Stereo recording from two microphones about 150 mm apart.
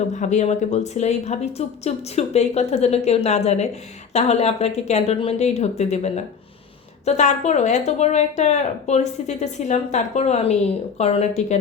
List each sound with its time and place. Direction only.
0.1 s speech: 50° left (ahead or behind)